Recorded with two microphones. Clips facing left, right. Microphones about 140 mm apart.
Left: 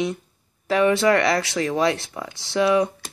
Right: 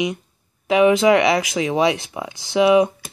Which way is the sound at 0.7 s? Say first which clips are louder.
Right 4 dB; 15° right (ahead or behind).